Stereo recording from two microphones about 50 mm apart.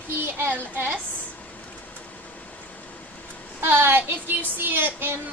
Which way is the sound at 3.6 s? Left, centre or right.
Right.